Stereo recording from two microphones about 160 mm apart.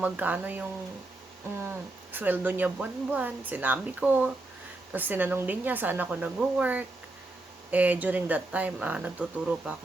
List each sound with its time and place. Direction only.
0.0 s speech: 10° right (ahead or behind)